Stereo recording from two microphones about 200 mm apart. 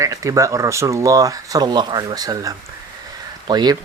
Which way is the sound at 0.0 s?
15° right (ahead or behind).